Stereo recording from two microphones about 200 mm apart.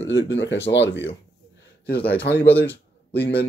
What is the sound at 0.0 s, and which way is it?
Speech, 65° left (ahead or behind).